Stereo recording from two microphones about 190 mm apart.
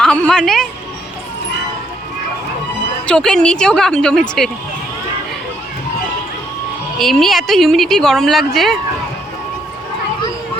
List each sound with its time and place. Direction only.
0.0 s a woman's voice: 5° left (ahead or behind)
3.1 s a woman's voice: 5° left (ahead or behind)
7.0 s a woman's voice: centre (ahead or behind)